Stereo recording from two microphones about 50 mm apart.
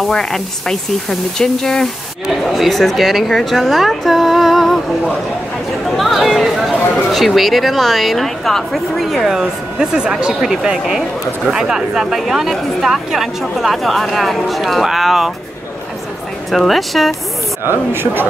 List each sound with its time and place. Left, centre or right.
0.1 s speech: centre
2.2 s speech: centre
5.9 s speech: centre
16.4 s speech: centre
17.6 s speech: right